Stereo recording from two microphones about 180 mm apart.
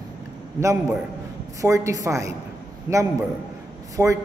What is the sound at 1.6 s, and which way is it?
Speech, 15° right (ahead or behind).